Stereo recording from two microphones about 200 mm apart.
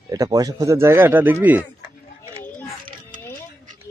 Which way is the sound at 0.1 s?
20° right (ahead or behind).